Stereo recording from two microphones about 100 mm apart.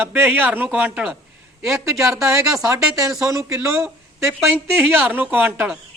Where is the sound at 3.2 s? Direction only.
30° right (ahead or behind).